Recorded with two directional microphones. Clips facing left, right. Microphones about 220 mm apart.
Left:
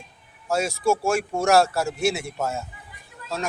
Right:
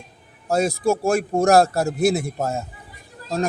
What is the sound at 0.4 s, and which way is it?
Speech, 35° right (ahead or behind).